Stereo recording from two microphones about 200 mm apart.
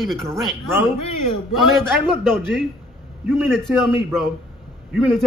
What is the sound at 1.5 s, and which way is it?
Speech, centre (ahead or behind).